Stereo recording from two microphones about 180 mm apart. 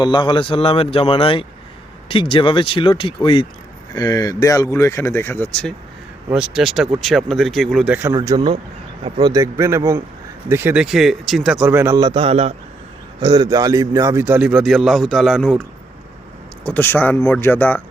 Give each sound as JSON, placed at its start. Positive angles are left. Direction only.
{"t": 0.0, "sound": "speech", "side_deg": 25}
{"t": 8.1, "sound": "a man's voice", "side_deg": -20}
{"t": 11.9, "sound": "a man's voice", "side_deg": -25}
{"t": 13.1, "sound": "a man's voice", "side_deg": -25}
{"t": 16.6, "sound": "speech", "side_deg": 10}